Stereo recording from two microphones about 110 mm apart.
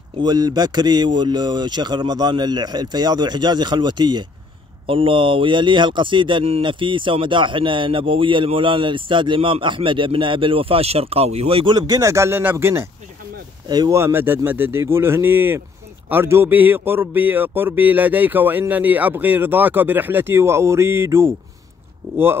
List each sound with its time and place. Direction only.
0.2 s speech: 40° right (ahead or behind)
4.8 s speech: 55° right (ahead or behind)
11.7 s speech: 35° right (ahead or behind)
13.7 s speech: 40° right (ahead or behind)
13.9 s a man's voice: 20° right (ahead or behind)